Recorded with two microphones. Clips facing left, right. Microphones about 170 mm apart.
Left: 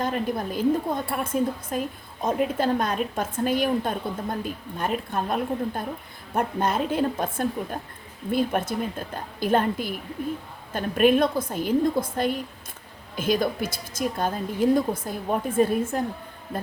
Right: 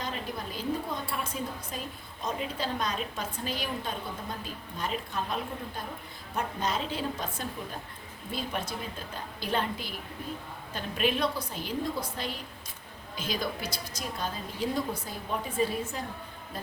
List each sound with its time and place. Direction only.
0.0 s a woman's voice: 50° left (ahead or behind)